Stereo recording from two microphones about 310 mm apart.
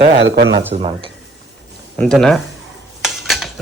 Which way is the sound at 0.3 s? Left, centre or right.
Right.